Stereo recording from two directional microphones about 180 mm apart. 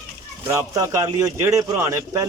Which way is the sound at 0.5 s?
20° right (ahead or behind).